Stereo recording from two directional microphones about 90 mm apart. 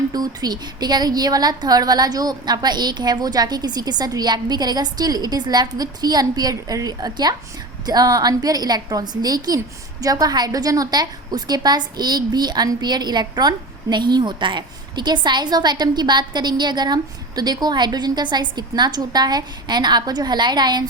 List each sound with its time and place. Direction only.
0.1 s a woman's voice: 50° right (ahead or behind)